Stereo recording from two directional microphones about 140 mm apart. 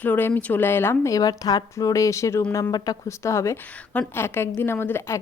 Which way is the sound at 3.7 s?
10° left (ahead or behind).